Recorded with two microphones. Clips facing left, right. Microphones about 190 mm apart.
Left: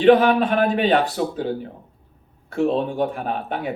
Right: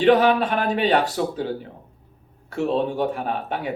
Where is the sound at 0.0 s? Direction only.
50° left (ahead or behind).